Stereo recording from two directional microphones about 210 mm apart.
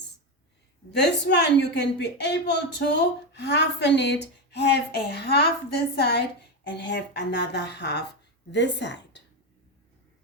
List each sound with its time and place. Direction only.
0.9 s a woman's voice: 50° left (ahead or behind)